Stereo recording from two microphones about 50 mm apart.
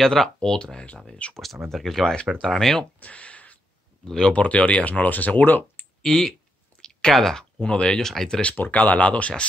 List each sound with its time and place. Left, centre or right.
0.0 s speech: centre
1.3 s speech: centre
2.8 s speech: left
4.0 s speech: centre
4.3 s speech: left
6.0 s speech: centre
6.8 s clicking: centre
7.7 s speech: left
8.0 s speech: centre
8.5 s speech: left